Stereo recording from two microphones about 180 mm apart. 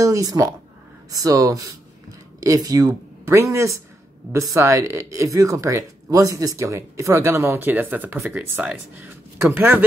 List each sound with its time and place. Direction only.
0.0 s speech: 20° right (ahead or behind)